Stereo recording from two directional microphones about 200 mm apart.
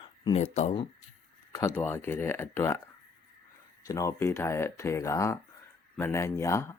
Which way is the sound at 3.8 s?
15° left (ahead or behind).